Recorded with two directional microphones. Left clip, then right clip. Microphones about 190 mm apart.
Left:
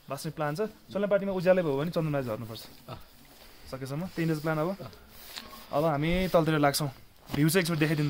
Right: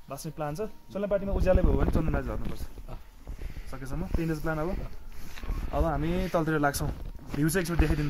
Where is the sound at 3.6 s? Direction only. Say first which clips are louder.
Left 2 dB; 25° left (ahead or behind).